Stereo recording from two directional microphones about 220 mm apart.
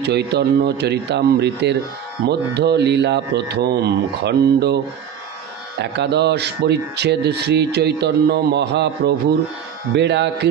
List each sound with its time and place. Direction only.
0.0 s speech: 50° right (ahead or behind)
5.8 s speech: 50° right (ahead or behind)